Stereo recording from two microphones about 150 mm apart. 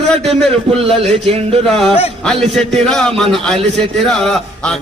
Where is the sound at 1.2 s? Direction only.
45° right (ahead or behind).